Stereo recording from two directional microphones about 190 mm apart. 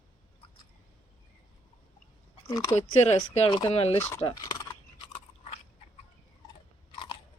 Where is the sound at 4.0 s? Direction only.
10° left (ahead or behind).